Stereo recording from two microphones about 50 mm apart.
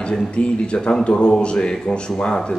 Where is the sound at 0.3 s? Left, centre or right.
Left.